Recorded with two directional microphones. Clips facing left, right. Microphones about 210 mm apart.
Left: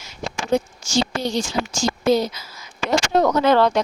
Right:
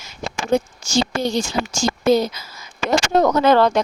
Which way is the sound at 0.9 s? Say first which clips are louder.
Right 2 dB; 50° right (ahead or behind).